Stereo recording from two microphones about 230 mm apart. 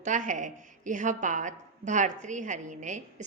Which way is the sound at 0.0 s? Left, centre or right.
Right.